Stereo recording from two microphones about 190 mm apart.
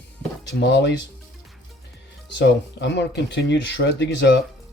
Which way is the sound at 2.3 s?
65° left (ahead or behind).